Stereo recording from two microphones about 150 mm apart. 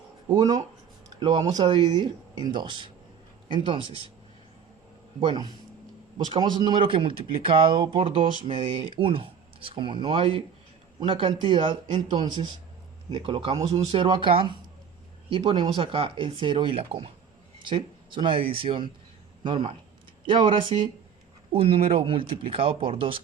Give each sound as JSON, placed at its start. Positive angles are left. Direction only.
{"t": 0.3, "sound": "speech", "side_deg": -25}
{"t": 6.1, "sound": "speech", "side_deg": -30}
{"t": 13.9, "sound": "a man's voice", "side_deg": -35}